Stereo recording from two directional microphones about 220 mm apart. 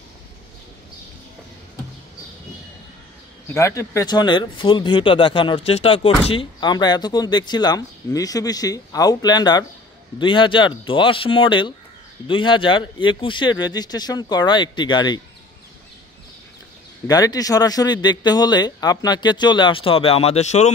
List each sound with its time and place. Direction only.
3.5 s speech: 15° left (ahead or behind)
17.1 s speech: 15° left (ahead or behind)